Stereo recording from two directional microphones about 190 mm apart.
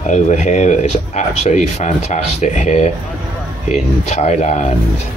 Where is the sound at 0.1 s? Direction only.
40° left (ahead or behind).